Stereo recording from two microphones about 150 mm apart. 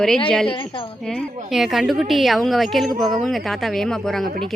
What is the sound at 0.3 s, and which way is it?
Speech, 5° left (ahead or behind).